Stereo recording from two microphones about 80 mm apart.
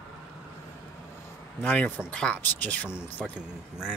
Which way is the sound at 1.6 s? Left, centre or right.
Left.